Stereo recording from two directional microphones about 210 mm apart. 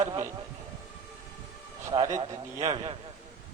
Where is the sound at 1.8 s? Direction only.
15° right (ahead or behind).